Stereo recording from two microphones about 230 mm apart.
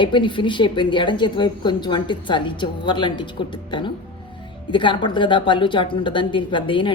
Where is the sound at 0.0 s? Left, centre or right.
Left.